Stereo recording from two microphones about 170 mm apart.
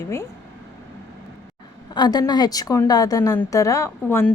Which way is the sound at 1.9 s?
25° left (ahead or behind).